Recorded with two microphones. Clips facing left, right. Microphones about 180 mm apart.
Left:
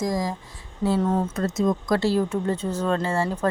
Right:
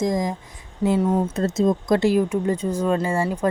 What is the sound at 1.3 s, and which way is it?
Speech, 25° right (ahead or behind).